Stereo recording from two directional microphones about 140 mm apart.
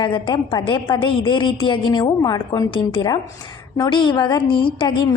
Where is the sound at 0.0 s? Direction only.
35° left (ahead or behind).